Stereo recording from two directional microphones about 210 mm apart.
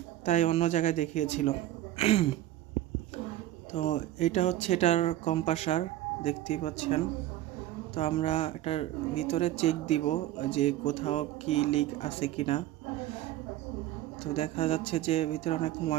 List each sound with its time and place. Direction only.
0.3 s speech: 35° left (ahead or behind)
3.7 s speech: 30° left (ahead or behind)
14.3 s speech: 30° left (ahead or behind)